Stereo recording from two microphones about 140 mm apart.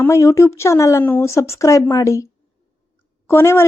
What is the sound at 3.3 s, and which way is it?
Speech, 15° left (ahead or behind).